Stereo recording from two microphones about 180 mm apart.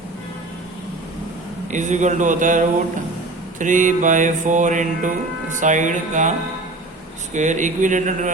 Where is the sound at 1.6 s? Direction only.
40° right (ahead or behind).